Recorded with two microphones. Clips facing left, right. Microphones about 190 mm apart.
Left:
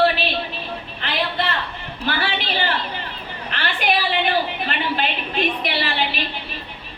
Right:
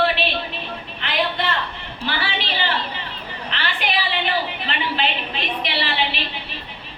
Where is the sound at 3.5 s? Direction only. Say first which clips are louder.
Left 3 dB; 45° left (ahead or behind).